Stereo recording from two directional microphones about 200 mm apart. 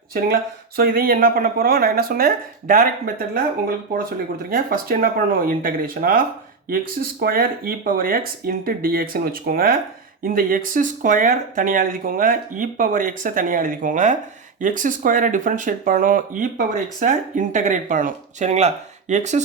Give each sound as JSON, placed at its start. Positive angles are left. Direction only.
{"t": 0.8, "sound": "speech", "side_deg": -45}
{"t": 4.4, "sound": "speech", "side_deg": -45}